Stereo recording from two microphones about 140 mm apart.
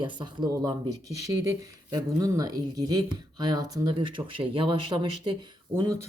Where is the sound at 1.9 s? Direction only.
25° right (ahead or behind).